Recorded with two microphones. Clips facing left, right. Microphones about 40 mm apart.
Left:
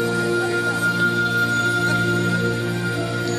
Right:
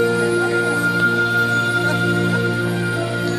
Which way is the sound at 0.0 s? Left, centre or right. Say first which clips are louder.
Right 4 dB; centre.